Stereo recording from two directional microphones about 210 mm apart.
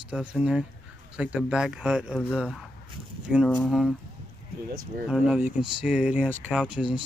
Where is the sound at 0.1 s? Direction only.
5° right (ahead or behind).